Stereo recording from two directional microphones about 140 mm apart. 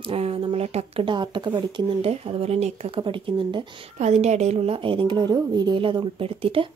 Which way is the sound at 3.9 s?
55° right (ahead or behind).